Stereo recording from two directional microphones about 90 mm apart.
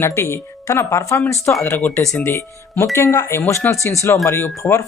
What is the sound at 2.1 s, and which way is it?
Speech, 25° left (ahead or behind).